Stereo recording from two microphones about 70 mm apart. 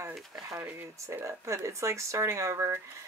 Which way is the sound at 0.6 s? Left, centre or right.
Right.